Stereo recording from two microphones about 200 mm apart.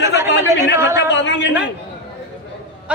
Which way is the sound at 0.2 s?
15° right (ahead or behind).